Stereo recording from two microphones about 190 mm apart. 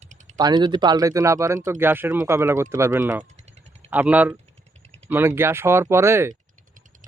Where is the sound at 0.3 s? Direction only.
20° right (ahead or behind).